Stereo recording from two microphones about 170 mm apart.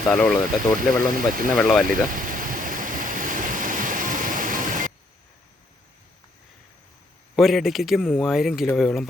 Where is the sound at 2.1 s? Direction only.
50° right (ahead or behind).